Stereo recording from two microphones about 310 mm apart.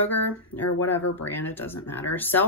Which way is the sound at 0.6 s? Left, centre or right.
Left.